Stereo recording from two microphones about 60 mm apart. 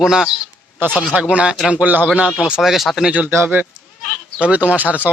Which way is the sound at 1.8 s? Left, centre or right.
Right.